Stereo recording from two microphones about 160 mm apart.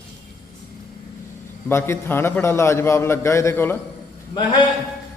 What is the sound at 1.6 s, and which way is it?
A man's voice, 15° left (ahead or behind).